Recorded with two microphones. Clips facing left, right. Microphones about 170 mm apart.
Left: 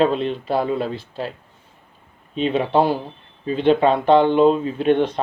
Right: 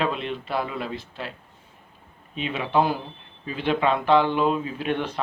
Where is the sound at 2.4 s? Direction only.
35° left (ahead or behind).